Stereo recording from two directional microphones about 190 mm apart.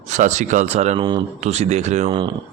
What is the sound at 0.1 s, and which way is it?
Speech, 40° right (ahead or behind).